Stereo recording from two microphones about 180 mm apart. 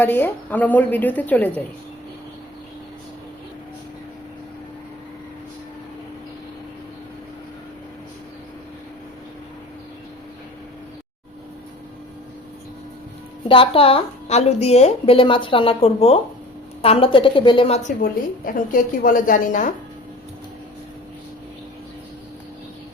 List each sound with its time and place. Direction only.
0.0 s a woman's voice: 10° left (ahead or behind)
13.5 s a woman's voice: 30° left (ahead or behind)
17.8 s a woman's voice: 50° left (ahead or behind)